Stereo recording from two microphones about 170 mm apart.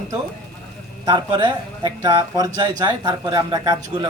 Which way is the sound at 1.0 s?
25° right (ahead or behind).